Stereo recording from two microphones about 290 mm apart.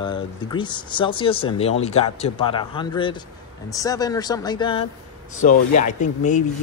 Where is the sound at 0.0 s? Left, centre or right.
Centre.